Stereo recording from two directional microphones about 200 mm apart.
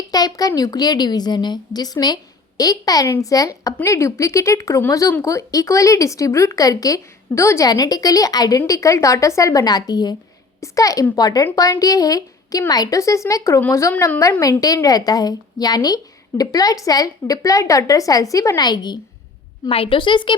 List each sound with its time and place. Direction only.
0.1 s a woman's voice: 20° left (ahead or behind)